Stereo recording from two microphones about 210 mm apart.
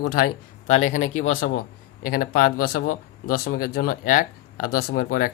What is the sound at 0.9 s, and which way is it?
Speech, 75° left (ahead or behind).